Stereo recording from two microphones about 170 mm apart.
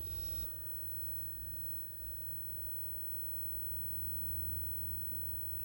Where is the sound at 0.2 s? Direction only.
40° right (ahead or behind).